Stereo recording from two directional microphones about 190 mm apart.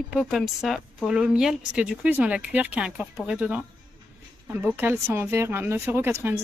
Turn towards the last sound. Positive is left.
turn(degrees=-10)  # may be behind; listen again after turning